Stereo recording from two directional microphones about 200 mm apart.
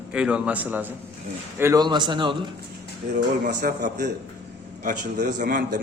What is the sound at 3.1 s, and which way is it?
Speech, 50° right (ahead or behind).